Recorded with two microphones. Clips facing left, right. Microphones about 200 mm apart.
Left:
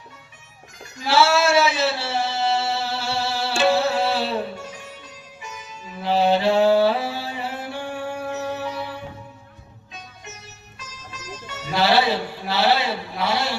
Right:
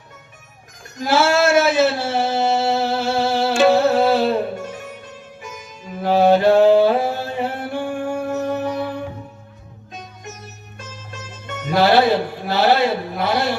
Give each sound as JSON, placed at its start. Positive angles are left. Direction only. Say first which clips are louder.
{"t": 0.9, "sound": "a sound", "louder": "right 2 dB", "side_deg": -50}
{"t": 3.6, "sound": "music", "louder": "right 5 dB", "side_deg": -50}
{"t": 10.8, "sound": "music", "louder": "right 5 dB", "side_deg": -50}